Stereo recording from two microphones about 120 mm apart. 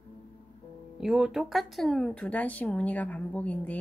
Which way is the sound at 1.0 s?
5° right (ahead or behind).